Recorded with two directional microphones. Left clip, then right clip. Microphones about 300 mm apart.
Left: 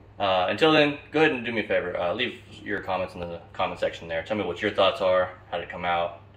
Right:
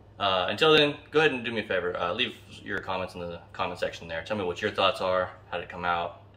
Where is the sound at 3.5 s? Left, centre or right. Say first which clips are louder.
Left 4 dB; centre.